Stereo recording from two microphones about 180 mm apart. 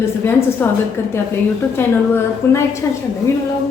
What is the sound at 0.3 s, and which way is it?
A woman's voice, 10° left (ahead or behind).